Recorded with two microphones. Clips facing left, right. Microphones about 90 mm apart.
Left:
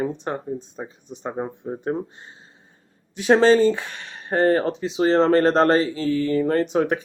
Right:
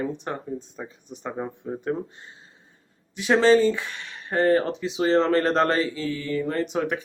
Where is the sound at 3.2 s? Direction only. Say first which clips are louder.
Left 3 dB; 40° left (ahead or behind).